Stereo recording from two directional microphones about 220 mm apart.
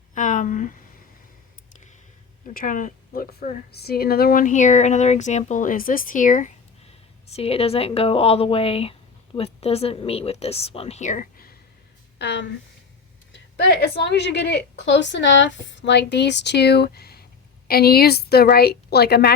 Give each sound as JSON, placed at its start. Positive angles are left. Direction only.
{"t": 0.1, "sound": "a sound", "side_deg": 35}
{"t": 2.5, "sound": "a woman's voice", "side_deg": 40}
{"t": 12.2, "sound": "a woman's voice", "side_deg": 50}
{"t": 13.9, "sound": "a woman's voice", "side_deg": 50}